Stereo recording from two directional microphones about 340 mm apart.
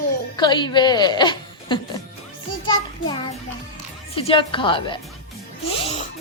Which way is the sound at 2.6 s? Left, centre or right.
Centre.